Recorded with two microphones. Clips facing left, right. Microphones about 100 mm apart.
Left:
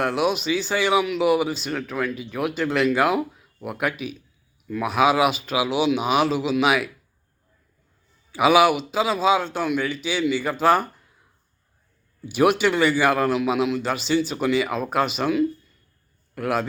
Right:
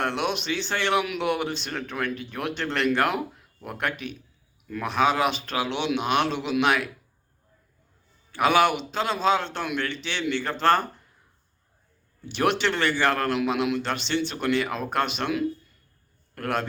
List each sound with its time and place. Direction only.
0.0 s speech: 5° left (ahead or behind)
8.3 s a man's voice: 5° left (ahead or behind)
12.2 s a man's voice: 5° left (ahead or behind)